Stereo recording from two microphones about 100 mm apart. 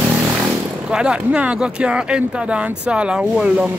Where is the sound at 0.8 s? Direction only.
10° right (ahead or behind).